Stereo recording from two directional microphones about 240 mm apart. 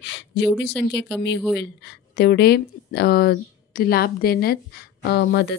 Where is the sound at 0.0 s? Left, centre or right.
Left.